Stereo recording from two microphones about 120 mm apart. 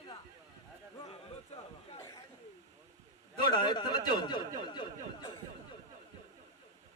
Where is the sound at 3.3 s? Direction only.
40° left (ahead or behind).